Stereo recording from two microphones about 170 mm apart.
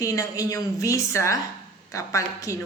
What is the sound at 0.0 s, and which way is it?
A woman's voice, 20° left (ahead or behind).